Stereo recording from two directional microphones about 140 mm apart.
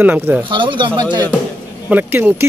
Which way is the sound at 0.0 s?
10° right (ahead or behind).